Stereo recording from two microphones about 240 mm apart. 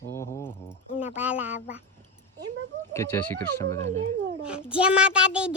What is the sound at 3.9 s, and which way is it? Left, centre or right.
Speech, right.